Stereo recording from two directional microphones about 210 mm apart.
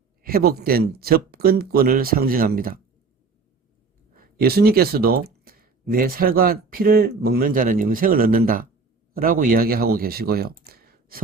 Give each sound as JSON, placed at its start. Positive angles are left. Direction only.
{"t": 0.2, "sound": "speech", "side_deg": -45}
{"t": 4.1, "sound": "speech", "side_deg": -45}
{"t": 10.6, "sound": "a sound", "side_deg": -45}